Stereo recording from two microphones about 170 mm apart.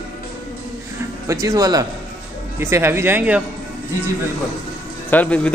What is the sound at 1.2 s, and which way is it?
Speech, 20° right (ahead or behind).